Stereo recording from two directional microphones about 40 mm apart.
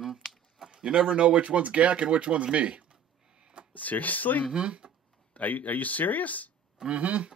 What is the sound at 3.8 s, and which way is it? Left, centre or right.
Speech, left.